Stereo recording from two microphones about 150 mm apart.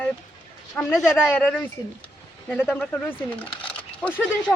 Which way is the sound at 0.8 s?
15° left (ahead or behind).